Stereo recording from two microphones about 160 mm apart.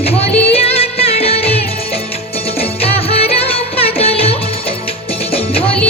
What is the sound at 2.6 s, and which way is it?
Music, 40° left (ahead or behind).